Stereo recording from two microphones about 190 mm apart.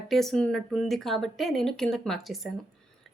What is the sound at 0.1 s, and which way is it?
A woman's voice, centre (ahead or behind).